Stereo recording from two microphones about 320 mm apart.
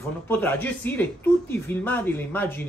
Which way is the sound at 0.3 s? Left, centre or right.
Centre.